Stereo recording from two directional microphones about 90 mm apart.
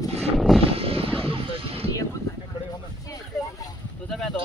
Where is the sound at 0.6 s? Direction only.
90° right.